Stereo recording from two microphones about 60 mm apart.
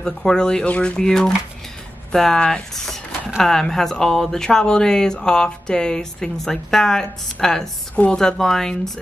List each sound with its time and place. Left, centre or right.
0.0 s speech: centre
7.9 s a woman's voice: left
8.2 s speech: centre